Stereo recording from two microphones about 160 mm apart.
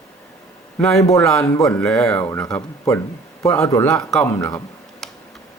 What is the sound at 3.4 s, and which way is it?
Speech, 15° left (ahead or behind).